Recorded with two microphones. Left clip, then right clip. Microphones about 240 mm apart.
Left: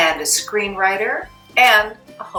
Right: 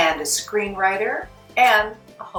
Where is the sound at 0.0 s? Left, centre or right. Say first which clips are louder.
Left 3 dB; centre.